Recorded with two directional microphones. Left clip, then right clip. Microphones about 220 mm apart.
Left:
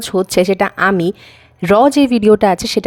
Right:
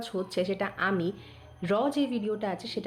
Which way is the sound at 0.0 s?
50° left (ahead or behind).